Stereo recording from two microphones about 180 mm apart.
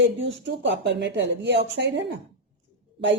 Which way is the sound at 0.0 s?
85° right.